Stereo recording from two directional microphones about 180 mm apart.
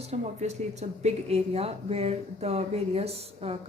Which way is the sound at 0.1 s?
40° right (ahead or behind).